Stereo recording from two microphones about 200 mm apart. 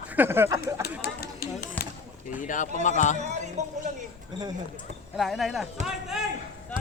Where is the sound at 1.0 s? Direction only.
50° left (ahead or behind).